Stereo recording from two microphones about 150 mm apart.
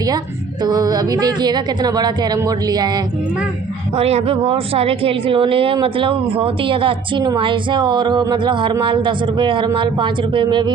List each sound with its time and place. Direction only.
0.6 s a woman's voice: 25° right (ahead or behind)
3.9 s a woman's voice: 45° right (ahead or behind)